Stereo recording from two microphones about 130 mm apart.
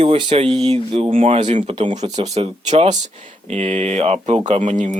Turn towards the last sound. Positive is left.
turn(degrees=-65)  # may be behind; listen again after turning